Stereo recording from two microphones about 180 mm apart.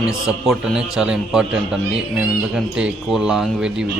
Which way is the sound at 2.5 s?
5° right (ahead or behind).